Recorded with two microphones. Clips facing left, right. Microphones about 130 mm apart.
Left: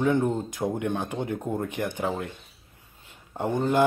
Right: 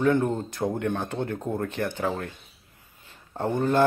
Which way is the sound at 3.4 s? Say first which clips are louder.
Right 1 dB; 15° left (ahead or behind).